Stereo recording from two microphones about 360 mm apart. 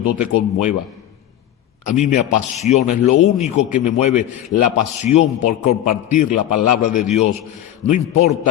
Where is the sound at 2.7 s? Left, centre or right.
Left.